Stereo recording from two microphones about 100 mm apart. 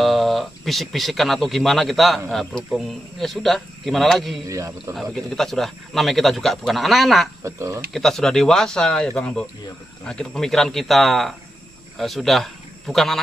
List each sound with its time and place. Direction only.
0.0 s a man's voice: centre (ahead or behind)
4.5 s speech: 30° right (ahead or behind)
4.9 s a man's voice: 5° left (ahead or behind)
7.4 s speech: 30° right (ahead or behind)
7.9 s a man's voice: 5° left (ahead or behind)